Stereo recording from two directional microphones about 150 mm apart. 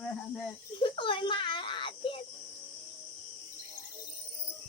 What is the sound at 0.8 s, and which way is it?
A child's voice, 35° left (ahead or behind).